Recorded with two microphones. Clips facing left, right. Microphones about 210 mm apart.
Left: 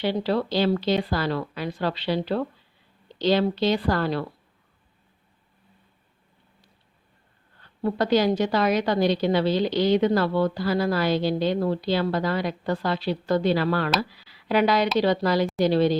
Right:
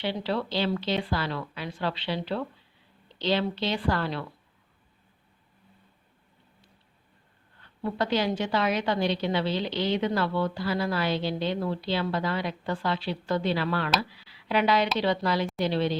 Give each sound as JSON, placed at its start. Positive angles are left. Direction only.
{"t": 0.0, "sound": "a woman's voice", "side_deg": 40}
{"t": 7.8, "sound": "a woman's voice", "side_deg": 40}